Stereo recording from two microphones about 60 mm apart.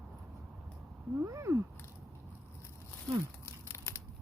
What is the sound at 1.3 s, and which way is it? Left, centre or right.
Cat, right.